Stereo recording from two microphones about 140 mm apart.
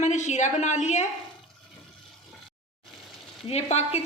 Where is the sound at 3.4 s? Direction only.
50° left (ahead or behind).